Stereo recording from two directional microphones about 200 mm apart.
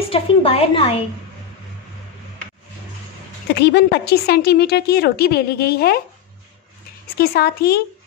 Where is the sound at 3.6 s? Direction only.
55° left (ahead or behind).